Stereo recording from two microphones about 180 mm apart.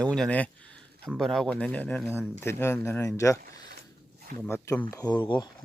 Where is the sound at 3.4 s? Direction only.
60° right (ahead or behind).